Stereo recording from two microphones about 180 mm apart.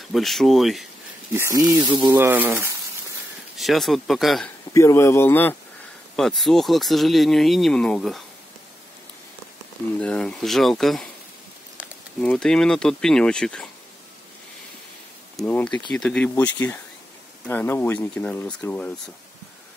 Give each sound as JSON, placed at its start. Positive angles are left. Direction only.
{"t": 0.1, "sound": "speech", "side_deg": 0}
{"t": 1.3, "sound": "speech", "side_deg": -15}
{"t": 3.5, "sound": "speech", "side_deg": 0}
{"t": 4.7, "sound": "speech", "side_deg": 15}
{"t": 9.9, "sound": "speech", "side_deg": 5}
{"t": 12.2, "sound": "speech", "side_deg": 5}
{"t": 15.3, "sound": "speech", "side_deg": 5}